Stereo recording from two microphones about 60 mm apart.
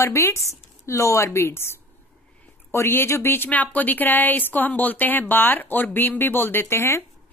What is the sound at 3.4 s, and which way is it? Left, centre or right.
A woman's voice, left.